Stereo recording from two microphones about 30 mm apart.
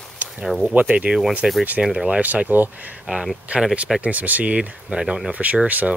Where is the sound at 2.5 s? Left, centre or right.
Right.